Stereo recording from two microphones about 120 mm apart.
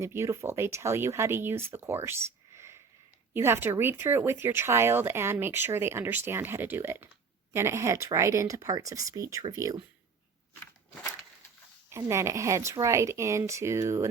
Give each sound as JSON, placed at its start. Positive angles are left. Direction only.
{"t": 0.0, "sound": "speech", "side_deg": -20}
{"t": 10.5, "sound": "crunch", "side_deg": 20}
{"t": 11.9, "sound": "speech", "side_deg": -25}